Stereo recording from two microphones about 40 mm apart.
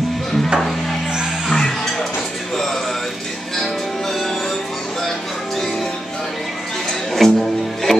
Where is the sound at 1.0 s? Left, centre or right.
Centre.